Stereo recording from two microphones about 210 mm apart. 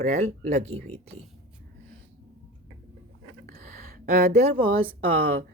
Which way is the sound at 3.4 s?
45° right (ahead or behind).